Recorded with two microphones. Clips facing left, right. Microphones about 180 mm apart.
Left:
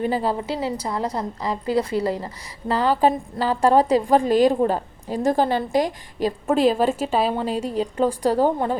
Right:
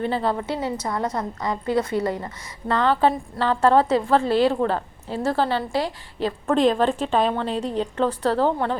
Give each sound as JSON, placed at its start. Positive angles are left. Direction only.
{"t": 0.0, "sound": "a woman's voice", "side_deg": 10}
{"t": 0.3, "sound": "a woman's voice", "side_deg": 30}
{"t": 2.8, "sound": "a woman's voice", "side_deg": 10}